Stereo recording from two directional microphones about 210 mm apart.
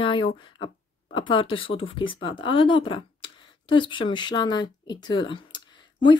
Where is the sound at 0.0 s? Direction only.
25° left (ahead or behind).